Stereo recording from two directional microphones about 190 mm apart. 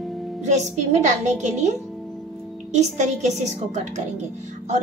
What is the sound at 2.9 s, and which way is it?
Speech, 40° right (ahead or behind).